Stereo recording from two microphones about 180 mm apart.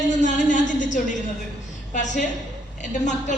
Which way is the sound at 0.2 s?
45° left (ahead or behind).